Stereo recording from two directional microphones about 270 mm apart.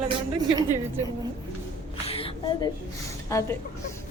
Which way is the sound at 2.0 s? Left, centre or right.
Centre.